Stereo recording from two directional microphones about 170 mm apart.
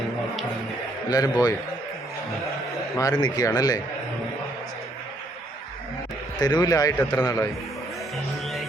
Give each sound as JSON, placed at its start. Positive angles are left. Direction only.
{"t": 1.1, "sound": "speech", "side_deg": 20}
{"t": 2.9, "sound": "speech", "side_deg": 20}
{"t": 6.4, "sound": "speech", "side_deg": 25}